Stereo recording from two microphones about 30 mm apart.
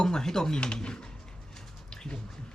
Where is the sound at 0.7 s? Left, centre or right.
Left.